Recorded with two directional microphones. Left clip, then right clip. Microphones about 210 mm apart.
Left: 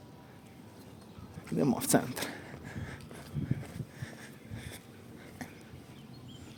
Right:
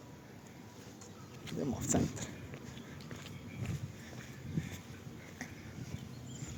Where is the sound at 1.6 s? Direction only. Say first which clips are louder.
Left 7 dB; 50° left (ahead or behind).